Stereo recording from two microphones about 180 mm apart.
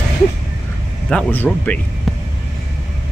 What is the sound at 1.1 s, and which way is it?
Speech, 10° left (ahead or behind).